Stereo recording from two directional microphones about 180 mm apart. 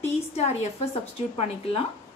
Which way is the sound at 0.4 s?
35° left (ahead or behind).